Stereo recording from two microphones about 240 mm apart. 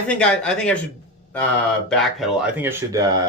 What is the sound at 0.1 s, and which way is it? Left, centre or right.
Speech, centre.